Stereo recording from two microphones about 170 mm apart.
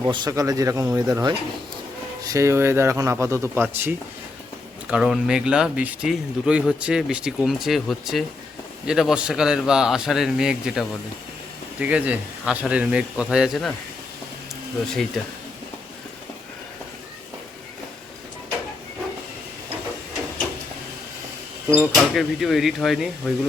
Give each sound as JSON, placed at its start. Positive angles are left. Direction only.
{"t": 0.0, "sound": "speech", "side_deg": -25}
{"t": 21.8, "sound": "speech", "side_deg": 0}